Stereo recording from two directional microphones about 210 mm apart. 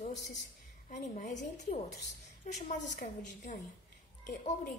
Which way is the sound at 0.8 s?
35° left (ahead or behind).